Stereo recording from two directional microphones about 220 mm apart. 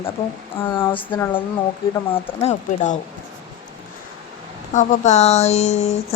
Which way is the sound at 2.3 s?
30° left (ahead or behind).